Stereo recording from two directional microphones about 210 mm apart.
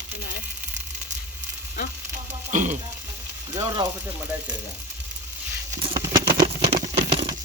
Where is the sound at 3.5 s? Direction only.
15° right (ahead or behind).